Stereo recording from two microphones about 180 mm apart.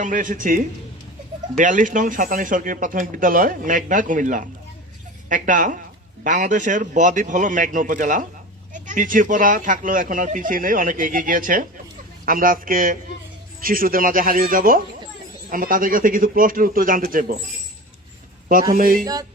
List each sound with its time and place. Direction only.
0.0 s speech: 45° right (ahead or behind)
18.7 s speech: 50° right (ahead or behind)